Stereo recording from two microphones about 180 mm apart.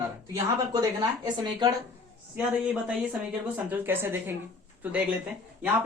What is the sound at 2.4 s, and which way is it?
Speech, 5° right (ahead or behind).